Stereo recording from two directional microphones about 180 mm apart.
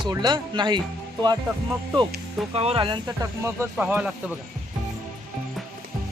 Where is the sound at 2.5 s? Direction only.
35° right (ahead or behind).